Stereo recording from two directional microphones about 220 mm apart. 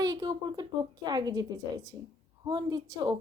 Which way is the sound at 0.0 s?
20° right (ahead or behind).